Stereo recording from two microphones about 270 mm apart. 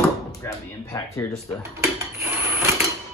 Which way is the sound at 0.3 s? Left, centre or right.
Centre.